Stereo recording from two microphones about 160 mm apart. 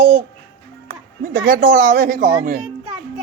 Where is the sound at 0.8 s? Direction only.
60° right (ahead or behind).